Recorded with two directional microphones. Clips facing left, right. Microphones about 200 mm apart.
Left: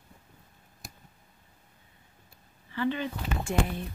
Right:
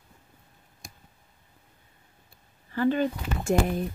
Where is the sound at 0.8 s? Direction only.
5° left (ahead or behind).